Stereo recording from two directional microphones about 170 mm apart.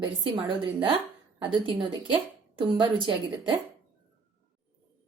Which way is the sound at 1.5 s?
30° right (ahead or behind).